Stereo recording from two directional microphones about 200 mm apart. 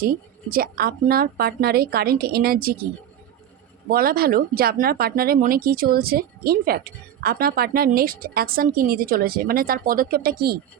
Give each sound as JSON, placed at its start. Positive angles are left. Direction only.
{"t": 0.5, "sound": "speech", "side_deg": -45}
{"t": 3.8, "sound": "speech", "side_deg": -50}